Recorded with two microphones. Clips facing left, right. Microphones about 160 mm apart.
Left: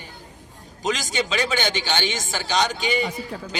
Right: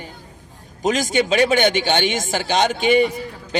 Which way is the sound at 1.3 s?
50° right (ahead or behind).